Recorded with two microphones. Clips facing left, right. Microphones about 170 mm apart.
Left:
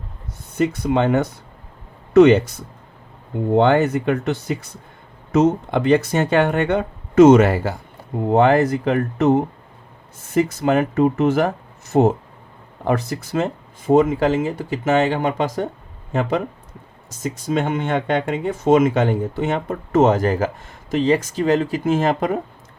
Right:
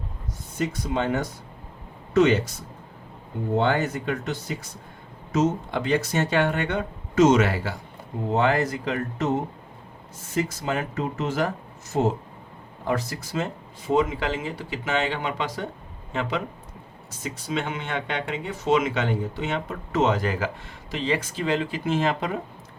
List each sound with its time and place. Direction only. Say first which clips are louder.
0.6 s speech: left 8 dB; 60° left (ahead or behind)
3.5 s speech: left 8 dB; 60° left (ahead or behind)